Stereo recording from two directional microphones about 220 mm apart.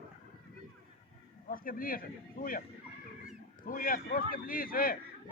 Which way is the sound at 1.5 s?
40° left (ahead or behind).